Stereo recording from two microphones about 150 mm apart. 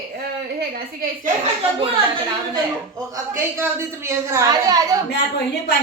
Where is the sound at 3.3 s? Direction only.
20° right (ahead or behind).